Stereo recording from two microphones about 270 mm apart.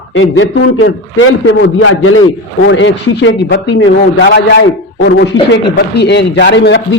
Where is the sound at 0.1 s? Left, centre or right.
Left.